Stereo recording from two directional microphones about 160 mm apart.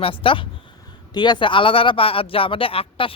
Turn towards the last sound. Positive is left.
turn(degrees=35)  # may be behind; listen again after turning